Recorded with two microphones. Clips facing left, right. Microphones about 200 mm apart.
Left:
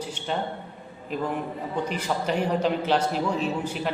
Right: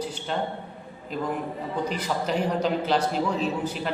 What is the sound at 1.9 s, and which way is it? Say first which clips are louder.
A man's voice: left 1 dB; 5° left (ahead or behind).